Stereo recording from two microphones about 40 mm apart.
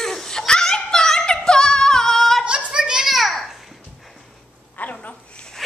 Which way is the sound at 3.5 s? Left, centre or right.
Centre.